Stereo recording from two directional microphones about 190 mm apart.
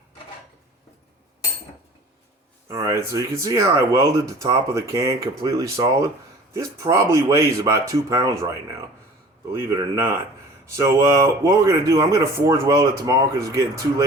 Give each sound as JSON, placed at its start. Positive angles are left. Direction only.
{"t": 2.6, "sound": "speech", "side_deg": -15}